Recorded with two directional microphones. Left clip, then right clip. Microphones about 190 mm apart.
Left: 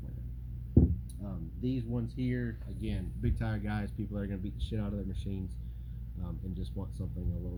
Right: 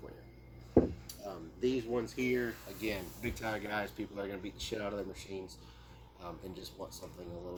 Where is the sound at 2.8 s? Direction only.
5° right (ahead or behind).